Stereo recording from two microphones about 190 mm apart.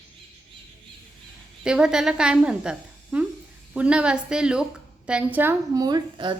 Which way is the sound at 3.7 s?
5° right (ahead or behind).